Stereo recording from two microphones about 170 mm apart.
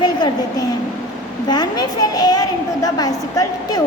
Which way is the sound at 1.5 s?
25° left (ahead or behind).